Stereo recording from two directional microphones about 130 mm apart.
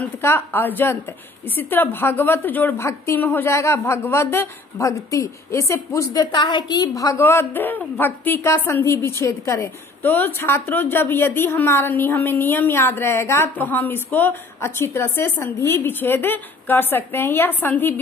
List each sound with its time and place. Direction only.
0.0 s a woman's voice: 15° left (ahead or behind)